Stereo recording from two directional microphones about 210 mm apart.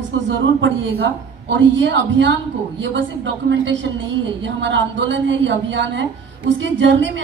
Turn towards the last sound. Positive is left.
turn(degrees=-60)  # may be behind; listen again after turning